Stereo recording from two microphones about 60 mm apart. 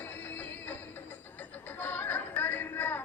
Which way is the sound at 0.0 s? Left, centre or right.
Left.